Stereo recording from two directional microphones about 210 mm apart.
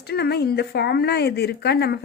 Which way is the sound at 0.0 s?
50° left (ahead or behind).